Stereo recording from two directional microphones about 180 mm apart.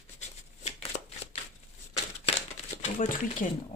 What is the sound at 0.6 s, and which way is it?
Shuffling cards, 35° left (ahead or behind).